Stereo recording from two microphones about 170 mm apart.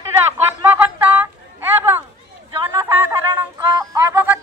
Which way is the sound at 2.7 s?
15° right (ahead or behind).